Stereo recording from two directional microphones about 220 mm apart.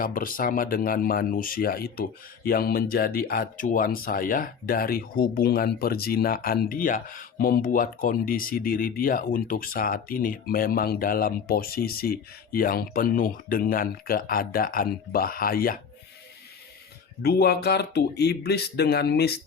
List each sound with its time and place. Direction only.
0.0 s speech: 40° left (ahead or behind)
17.2 s speech: 45° left (ahead or behind)